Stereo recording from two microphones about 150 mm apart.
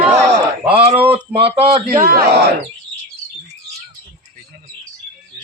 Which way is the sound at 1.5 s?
40° right (ahead or behind).